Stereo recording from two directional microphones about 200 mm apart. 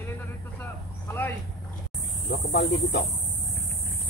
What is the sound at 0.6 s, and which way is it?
Vehicle, 10° left (ahead or behind).